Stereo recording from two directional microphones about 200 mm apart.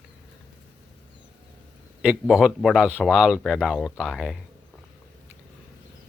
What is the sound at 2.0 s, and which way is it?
Speech, 5° right (ahead or behind).